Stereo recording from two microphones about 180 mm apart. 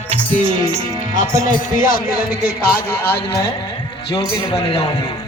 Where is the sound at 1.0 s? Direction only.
45° left (ahead or behind).